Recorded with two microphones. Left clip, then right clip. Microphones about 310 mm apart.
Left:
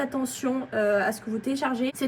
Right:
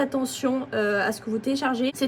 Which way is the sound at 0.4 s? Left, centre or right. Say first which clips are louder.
Left 1 dB; centre.